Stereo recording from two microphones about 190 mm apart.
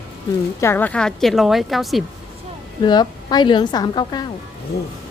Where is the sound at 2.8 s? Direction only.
20° left (ahead or behind).